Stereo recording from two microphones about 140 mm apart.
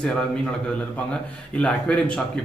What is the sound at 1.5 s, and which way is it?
Speech, 10° left (ahead or behind).